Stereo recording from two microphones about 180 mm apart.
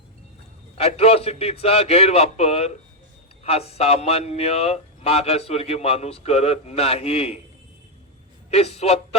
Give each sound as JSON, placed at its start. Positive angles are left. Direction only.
{"t": 0.8, "sound": "speech", "side_deg": 35}
{"t": 8.4, "sound": "speech", "side_deg": 35}